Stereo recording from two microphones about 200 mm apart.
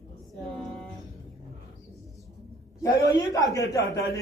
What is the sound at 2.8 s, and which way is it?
A man's voice, 15° left (ahead or behind).